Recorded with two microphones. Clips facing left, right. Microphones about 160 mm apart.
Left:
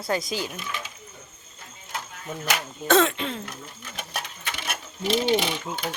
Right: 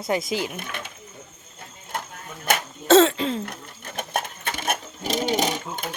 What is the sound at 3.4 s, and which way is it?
Coin, 50° right (ahead or behind).